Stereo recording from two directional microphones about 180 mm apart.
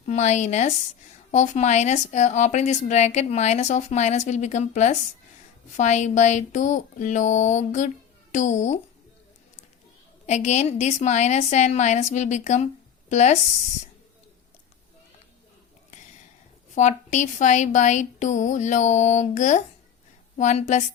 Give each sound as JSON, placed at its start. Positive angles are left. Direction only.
{"t": 0.0, "sound": "speech", "side_deg": 40}
{"t": 5.7, "sound": "a sound", "side_deg": 40}
{"t": 10.2, "sound": "speech", "side_deg": 40}
{"t": 16.7, "sound": "speech", "side_deg": 40}